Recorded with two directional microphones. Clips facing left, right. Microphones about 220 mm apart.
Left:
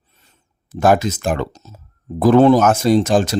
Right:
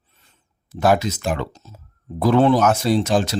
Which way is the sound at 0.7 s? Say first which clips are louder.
Left 3 dB; 50° left (ahead or behind).